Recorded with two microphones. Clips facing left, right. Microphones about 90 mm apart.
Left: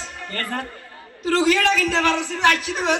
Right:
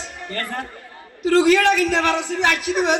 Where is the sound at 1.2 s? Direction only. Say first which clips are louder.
Right 4 dB; 20° right (ahead or behind).